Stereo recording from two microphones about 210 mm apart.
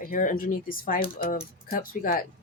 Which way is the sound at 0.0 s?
40° left (ahead or behind).